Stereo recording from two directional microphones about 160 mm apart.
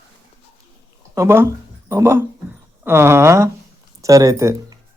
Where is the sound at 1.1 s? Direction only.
15° right (ahead or behind).